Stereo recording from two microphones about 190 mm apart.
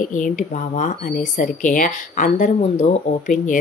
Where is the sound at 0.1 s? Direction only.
40° left (ahead or behind).